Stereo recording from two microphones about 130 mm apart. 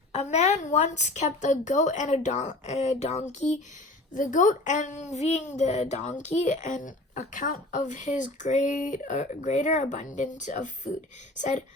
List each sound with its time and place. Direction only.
0.1 s a woman's voice: 60° left (ahead or behind)
4.1 s a woman's voice: 80° left